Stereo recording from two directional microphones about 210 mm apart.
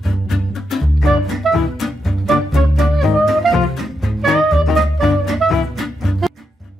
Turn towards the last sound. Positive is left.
turn(degrees=0)  # may be behind; listen again after turning